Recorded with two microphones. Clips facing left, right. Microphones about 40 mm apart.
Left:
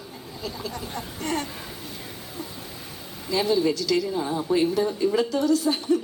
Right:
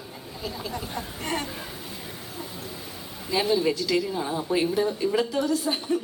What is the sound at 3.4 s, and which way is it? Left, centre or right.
A man's voice, centre.